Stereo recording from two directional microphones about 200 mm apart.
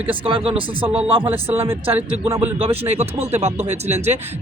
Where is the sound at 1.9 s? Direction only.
15° right (ahead or behind).